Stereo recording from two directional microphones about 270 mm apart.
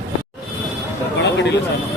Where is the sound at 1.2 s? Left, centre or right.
Left.